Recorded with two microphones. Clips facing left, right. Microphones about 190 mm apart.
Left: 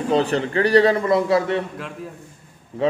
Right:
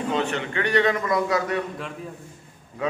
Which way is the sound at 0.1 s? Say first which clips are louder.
Left 9 dB; 35° left (ahead or behind).